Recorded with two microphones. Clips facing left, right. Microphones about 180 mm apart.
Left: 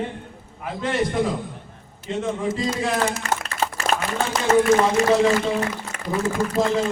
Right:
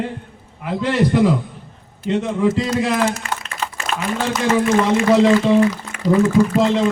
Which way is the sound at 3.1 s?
45° left (ahead or behind).